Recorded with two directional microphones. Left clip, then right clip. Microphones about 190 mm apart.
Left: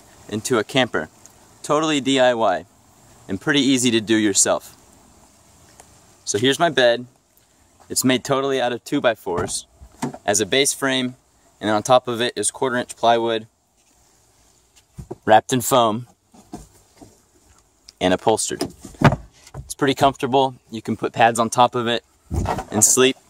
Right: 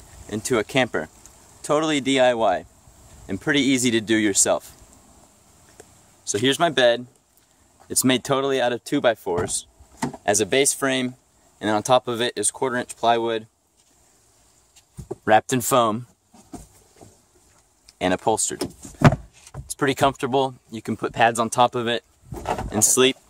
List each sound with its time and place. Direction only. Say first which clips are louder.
0.3 s speech: left 2 dB; centre (ahead or behind)
6.2 s speech: left 2 dB; 5° left (ahead or behind)
15.2 s speech: left 3 dB; centre (ahead or behind)
17.8 s speech: left 3 dB; 10° left (ahead or behind)
22.4 s a sound: left 2 dB; 15° right (ahead or behind)
22.7 s speech: left 2 dB; 5° left (ahead or behind)